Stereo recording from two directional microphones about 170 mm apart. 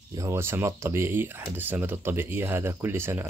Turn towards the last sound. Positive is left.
turn(degrees=-15)  # may be behind; listen again after turning